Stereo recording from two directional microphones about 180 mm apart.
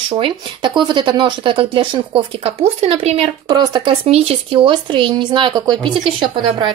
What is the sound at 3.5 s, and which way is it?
Speech, 25° right (ahead or behind).